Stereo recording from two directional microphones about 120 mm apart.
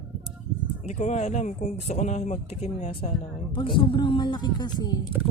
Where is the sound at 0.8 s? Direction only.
75° left (ahead or behind); by 5.0 s 35° left (ahead or behind).